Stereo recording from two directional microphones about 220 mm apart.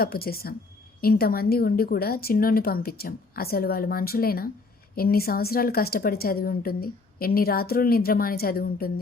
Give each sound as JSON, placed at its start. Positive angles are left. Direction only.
{"t": 0.0, "sound": "a woman's voice", "side_deg": 45}